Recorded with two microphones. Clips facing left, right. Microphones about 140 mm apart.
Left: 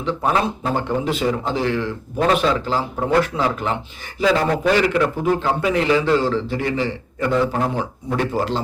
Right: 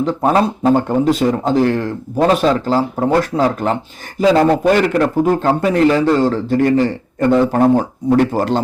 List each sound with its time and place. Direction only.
0.0 s speech: 40° right (ahead or behind)
4.5 s a man's voice: 50° right (ahead or behind)